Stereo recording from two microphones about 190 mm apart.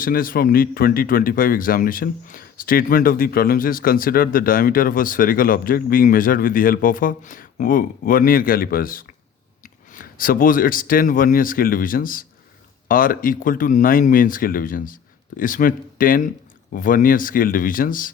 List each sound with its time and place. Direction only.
0.0 s speech: 50° left (ahead or behind)